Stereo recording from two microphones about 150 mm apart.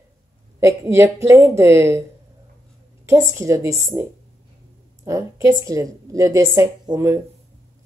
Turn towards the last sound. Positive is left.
turn(degrees=-20)  # may be behind; listen again after turning